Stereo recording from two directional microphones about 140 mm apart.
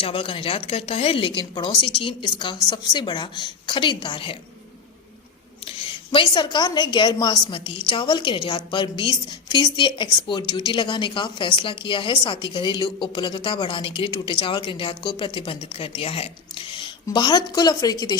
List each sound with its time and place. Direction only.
0.0 s a woman's voice: 40° left (ahead or behind)
5.6 s a woman's voice: 35° left (ahead or behind)